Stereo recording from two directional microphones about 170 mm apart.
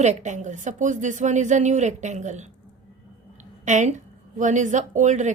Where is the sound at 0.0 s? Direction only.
45° right (ahead or behind).